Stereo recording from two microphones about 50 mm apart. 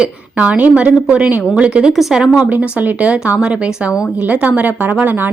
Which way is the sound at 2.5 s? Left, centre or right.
Right.